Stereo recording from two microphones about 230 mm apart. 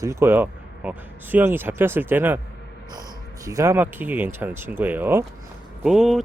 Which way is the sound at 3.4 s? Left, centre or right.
Centre.